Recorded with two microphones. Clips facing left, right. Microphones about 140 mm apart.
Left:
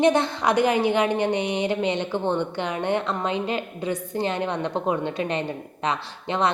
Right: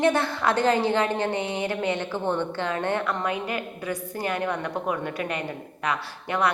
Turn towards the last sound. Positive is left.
turn(degrees=20)  # may be behind; listen again after turning